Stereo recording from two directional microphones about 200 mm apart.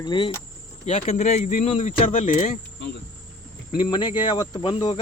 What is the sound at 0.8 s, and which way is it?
Speech, 35° left (ahead or behind).